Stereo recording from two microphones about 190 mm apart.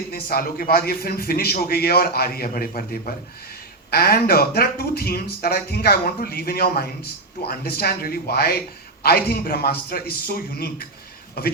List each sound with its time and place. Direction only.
0.1 s a man's voice: 50° left (ahead or behind)